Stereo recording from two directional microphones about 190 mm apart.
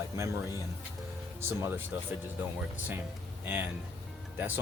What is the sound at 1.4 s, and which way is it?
Speech, 10° right (ahead or behind).